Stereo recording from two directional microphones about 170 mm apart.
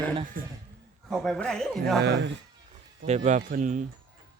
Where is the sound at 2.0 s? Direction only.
75° right (ahead or behind).